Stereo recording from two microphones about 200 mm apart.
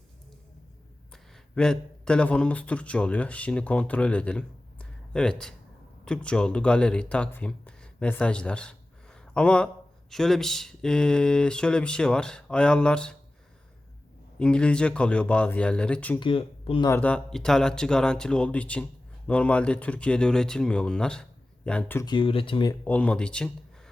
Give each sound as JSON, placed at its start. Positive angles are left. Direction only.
{"t": 1.1, "sound": "speech", "side_deg": 5}
{"t": 14.3, "sound": "speech", "side_deg": 5}
{"t": 16.2, "sound": "speech", "side_deg": 25}
{"t": 16.9, "sound": "speech", "side_deg": 5}
{"t": 22.0, "sound": "speech", "side_deg": 25}
{"t": 22.8, "sound": "speech", "side_deg": 5}